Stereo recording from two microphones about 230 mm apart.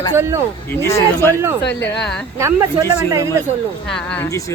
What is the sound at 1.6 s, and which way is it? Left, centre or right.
Speech, left.